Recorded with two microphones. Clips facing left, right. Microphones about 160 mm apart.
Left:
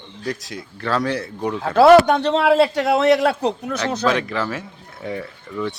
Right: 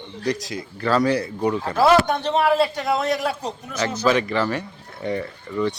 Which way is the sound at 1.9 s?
70° left (ahead or behind).